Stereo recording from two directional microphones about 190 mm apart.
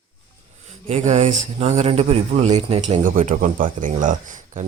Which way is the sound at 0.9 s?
35° right (ahead or behind).